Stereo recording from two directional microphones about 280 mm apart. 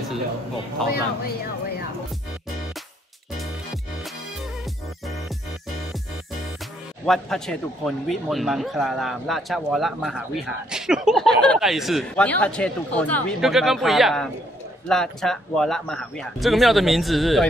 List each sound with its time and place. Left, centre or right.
1.2 s speech: left
7.1 s a man's voice: centre